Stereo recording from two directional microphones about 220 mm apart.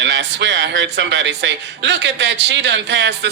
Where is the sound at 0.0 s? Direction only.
55° right (ahead or behind).